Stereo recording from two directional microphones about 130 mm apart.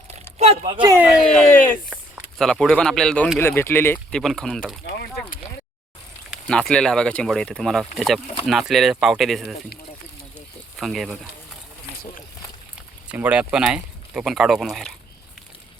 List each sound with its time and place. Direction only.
0.1 s a sound: 50° right (ahead or behind)
0.9 s speech: 15° right (ahead or behind)
1.2 s speech: 5° left (ahead or behind)
4.1 s speech: 5° left (ahead or behind)
6.5 s speech: 5° left (ahead or behind)
10.8 s speech: centre (ahead or behind)
13.1 s speech: 10° right (ahead or behind)